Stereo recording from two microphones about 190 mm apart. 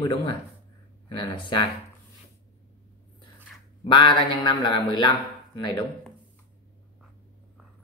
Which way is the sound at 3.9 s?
25° left (ahead or behind).